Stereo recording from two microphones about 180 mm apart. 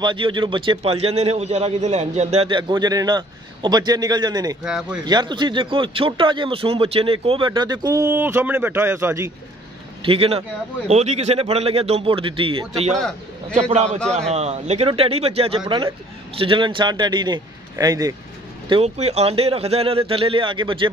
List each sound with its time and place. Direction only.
0.0 s a man's voice: 25° right (ahead or behind)
4.6 s speech: 5° right (ahead or behind)
5.0 s a man's voice: 25° right (ahead or behind)
10.0 s a man's voice: 30° right (ahead or behind)
13.8 s speech: 5° left (ahead or behind)
14.1 s a man's voice: 35° right (ahead or behind); by 18.1 s 20° right (ahead or behind)
18.7 s a man's voice: 35° right (ahead or behind)